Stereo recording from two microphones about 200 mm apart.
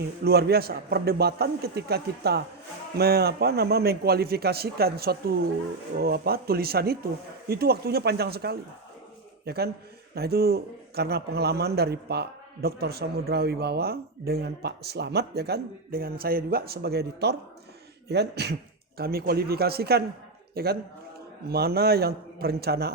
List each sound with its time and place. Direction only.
0.3 s a man's voice: 50° right (ahead or behind)